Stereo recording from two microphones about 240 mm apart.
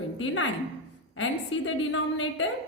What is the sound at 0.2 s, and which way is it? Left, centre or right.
A woman's voice, left.